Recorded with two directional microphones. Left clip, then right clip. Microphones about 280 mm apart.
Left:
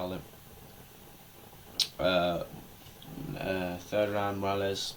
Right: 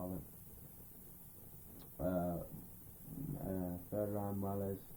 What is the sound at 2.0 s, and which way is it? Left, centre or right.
Speech, centre.